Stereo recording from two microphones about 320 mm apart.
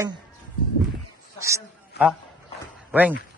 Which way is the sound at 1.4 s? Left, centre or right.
Centre.